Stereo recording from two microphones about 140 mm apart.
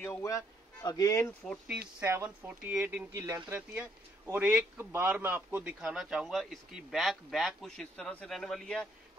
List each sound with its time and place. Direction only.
0.0 s speech: 20° left (ahead or behind)
1.4 s a man's voice: centre (ahead or behind)
2.0 s speech: 15° right (ahead or behind)
3.1 s speech: 25° right (ahead or behind)
3.5 s a man's voice: 10° right (ahead or behind)